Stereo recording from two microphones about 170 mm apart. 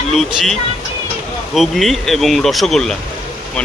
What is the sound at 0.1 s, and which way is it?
Speech, centre (ahead or behind).